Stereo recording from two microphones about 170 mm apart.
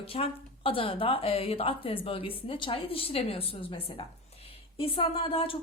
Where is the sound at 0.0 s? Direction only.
35° left (ahead or behind).